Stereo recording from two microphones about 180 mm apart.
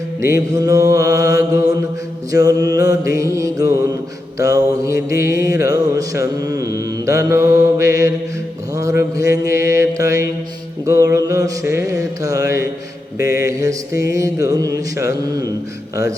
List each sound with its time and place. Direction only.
0.2 s mantra: 15° right (ahead or behind)